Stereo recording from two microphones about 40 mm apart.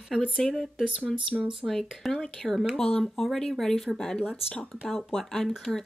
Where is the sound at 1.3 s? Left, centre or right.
Centre.